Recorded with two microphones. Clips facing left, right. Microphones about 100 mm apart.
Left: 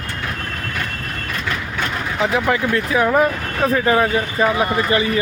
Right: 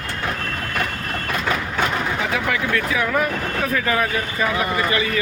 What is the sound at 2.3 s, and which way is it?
Speech, 30° left (ahead or behind).